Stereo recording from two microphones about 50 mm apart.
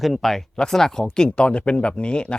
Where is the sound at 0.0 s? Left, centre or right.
Centre.